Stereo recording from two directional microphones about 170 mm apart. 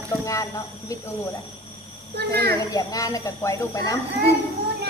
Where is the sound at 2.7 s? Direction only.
20° left (ahead or behind).